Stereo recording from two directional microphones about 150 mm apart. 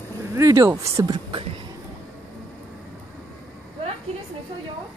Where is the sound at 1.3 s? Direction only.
40° right (ahead or behind).